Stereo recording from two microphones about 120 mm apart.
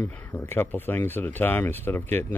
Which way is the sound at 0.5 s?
15° left (ahead or behind).